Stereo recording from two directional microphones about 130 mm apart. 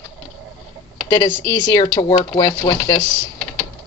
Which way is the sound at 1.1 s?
30° left (ahead or behind).